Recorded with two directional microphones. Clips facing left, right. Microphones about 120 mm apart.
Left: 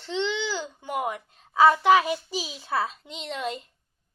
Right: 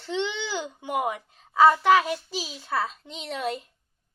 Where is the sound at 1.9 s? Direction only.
15° left (ahead or behind).